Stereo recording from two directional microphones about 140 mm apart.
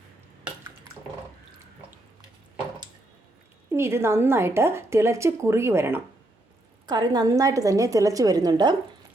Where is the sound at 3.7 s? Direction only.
20° right (ahead or behind).